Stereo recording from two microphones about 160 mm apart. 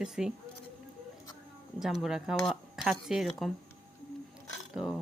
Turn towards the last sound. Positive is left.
turn(degrees=-5)  # may be behind; listen again after turning